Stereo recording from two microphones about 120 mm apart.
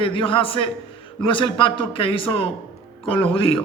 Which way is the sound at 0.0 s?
45° left (ahead or behind).